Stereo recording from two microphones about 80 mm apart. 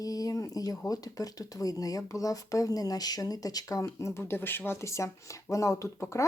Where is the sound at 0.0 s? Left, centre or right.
Left.